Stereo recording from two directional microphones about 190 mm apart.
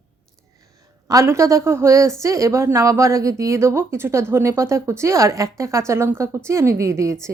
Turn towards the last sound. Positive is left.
turn(degrees=-15)  # may be behind; listen again after turning